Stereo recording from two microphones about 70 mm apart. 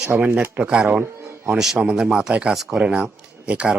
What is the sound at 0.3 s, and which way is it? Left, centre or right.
Speech, centre.